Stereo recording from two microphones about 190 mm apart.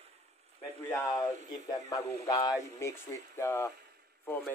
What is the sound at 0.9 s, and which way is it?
Speech, 15° left (ahead or behind).